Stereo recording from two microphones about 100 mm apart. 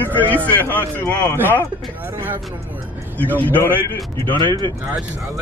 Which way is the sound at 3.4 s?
15° left (ahead or behind).